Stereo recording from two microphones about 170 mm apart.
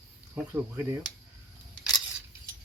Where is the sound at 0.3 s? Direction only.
15° right (ahead or behind).